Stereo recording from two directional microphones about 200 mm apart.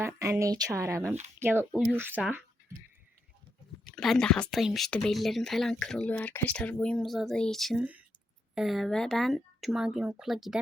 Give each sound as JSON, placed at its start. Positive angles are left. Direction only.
{"t": 0.0, "sound": "speech", "side_deg": -15}
{"t": 3.9, "sound": "speech", "side_deg": 0}